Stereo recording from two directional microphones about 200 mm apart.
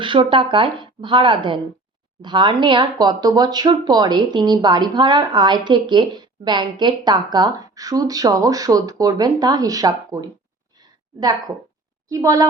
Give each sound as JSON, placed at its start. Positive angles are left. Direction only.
{"t": 0.0, "sound": "a woman's voice", "side_deg": -25}